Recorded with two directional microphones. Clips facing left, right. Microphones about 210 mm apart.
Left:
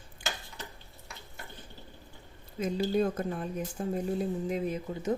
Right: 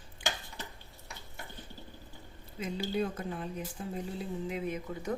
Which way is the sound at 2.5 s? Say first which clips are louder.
Left 5 dB; 45° left (ahead or behind).